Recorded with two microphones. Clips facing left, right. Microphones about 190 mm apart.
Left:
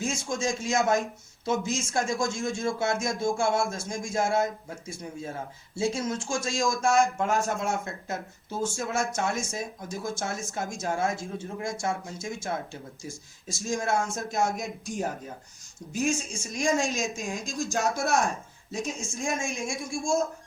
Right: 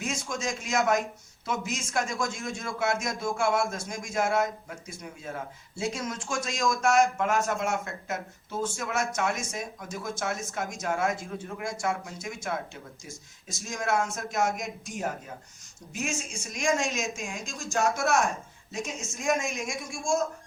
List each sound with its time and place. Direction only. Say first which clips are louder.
0.0 s speech: left 3 dB; 25° left (ahead or behind)
5.8 s speech: left 4 dB; 25° left (ahead or behind)